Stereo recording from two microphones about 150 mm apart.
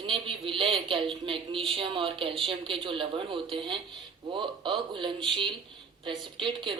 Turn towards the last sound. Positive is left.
turn(degrees=-35)  # may be behind; listen again after turning